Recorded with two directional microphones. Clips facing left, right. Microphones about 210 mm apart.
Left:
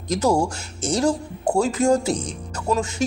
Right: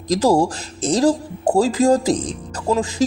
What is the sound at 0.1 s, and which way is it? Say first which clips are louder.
Speech: right 4 dB; 35° right (ahead or behind).